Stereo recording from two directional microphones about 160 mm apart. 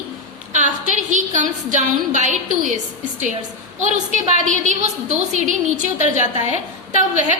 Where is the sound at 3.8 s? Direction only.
50° right (ahead or behind).